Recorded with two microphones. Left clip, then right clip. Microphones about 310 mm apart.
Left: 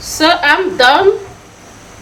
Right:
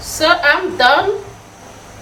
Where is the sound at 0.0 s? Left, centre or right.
Left.